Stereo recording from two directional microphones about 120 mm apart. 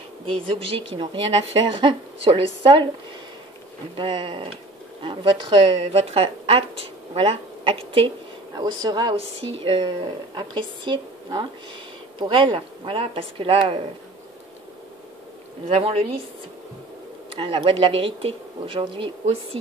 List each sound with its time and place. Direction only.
0.4 s a woman's voice: 45° right (ahead or behind)
3.9 s a woman's voice: 45° right (ahead or behind)
8.5 s a woman's voice: 35° right (ahead or behind)
15.7 s a woman's voice: 55° right (ahead or behind)
17.3 s a woman's voice: 50° right (ahead or behind)